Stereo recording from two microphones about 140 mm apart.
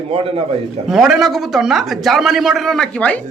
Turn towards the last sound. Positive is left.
turn(degrees=5)  # may be behind; listen again after turning